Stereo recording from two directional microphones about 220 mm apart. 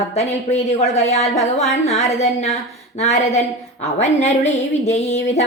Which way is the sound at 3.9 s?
30° left (ahead or behind).